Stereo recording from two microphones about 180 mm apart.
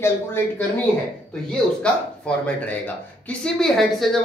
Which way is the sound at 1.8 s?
5° left (ahead or behind).